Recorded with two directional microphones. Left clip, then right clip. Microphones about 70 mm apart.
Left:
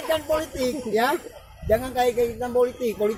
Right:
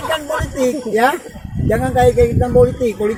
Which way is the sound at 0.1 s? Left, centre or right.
Left.